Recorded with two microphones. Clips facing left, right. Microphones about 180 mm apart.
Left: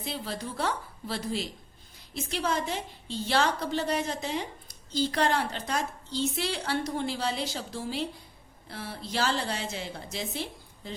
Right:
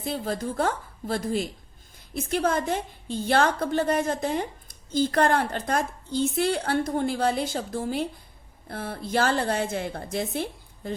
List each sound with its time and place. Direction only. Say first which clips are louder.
0.0 s a woman's voice: right 6 dB; 45° right (ahead or behind)